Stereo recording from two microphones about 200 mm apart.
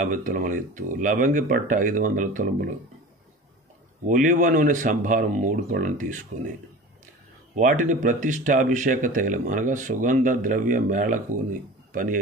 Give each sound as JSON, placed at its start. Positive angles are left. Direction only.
{"t": 0.0, "sound": "speech", "side_deg": -40}
{"t": 4.0, "sound": "speech", "side_deg": -40}
{"t": 7.5, "sound": "speech", "side_deg": -40}